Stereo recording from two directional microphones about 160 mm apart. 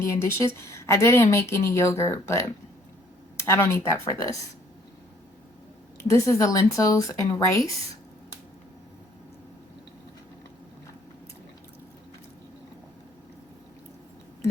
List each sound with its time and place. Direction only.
0.0 s a woman's voice: 15° left (ahead or behind)
6.0 s speech: 20° left (ahead or behind)